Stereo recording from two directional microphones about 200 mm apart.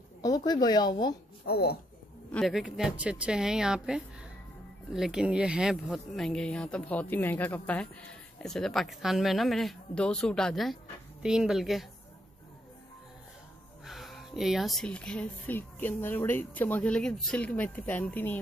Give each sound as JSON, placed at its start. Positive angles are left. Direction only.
{"t": 0.2, "sound": "speech", "side_deg": 20}
{"t": 1.4, "sound": "speech", "side_deg": 50}
{"t": 2.3, "sound": "speech", "side_deg": 0}
{"t": 13.8, "sound": "speech", "side_deg": 0}